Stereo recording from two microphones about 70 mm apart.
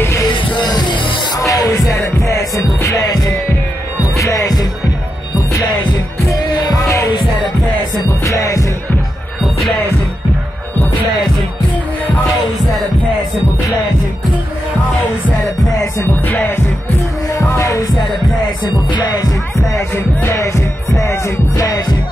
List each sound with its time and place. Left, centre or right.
0.2 s music: left
1.4 s music: left
4.2 s music: left
6.5 s music: left
8.3 s music: left
16.3 s music: left
18.9 s music: left
20.2 s music: left